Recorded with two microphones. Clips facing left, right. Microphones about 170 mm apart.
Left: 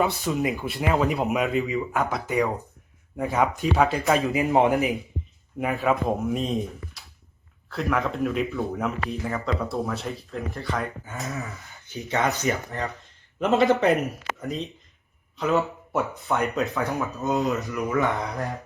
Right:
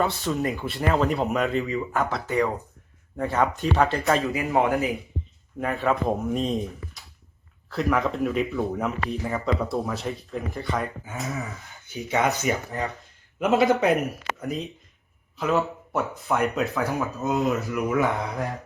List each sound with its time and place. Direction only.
0.3 s speech: centre (ahead or behind)
2.0 s speech: 15° left (ahead or behind)
4.2 s speech: 20° left (ahead or behind)
5.5 s speech: 5° left (ahead or behind)
12.5 s speech: 10° right (ahead or behind)